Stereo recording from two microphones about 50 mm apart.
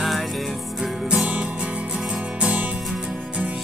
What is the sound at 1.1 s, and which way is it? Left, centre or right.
Music, right.